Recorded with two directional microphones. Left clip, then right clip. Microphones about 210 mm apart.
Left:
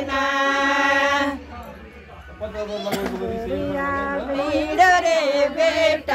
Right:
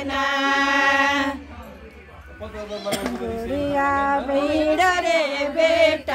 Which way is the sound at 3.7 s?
60° right (ahead or behind).